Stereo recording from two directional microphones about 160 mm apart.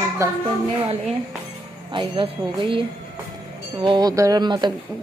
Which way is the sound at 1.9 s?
30° right (ahead or behind).